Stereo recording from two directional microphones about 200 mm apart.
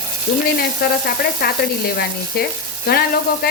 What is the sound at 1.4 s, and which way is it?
Stir, 50° left (ahead or behind).